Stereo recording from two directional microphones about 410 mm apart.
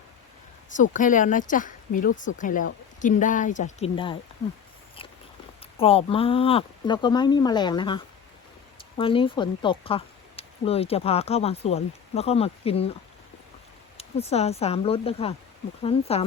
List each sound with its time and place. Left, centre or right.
0.7 s speech: centre
5.7 s speech: centre
13.9 s speech: centre